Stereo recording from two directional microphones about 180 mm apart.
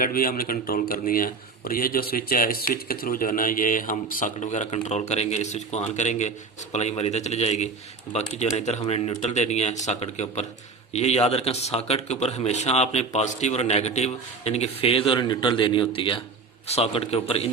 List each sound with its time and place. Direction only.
0.0 s speech: 55° left (ahead or behind); by 17.5 s 35° left (ahead or behind)